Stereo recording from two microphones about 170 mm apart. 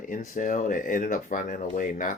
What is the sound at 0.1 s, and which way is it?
Speech, 50° left (ahead or behind).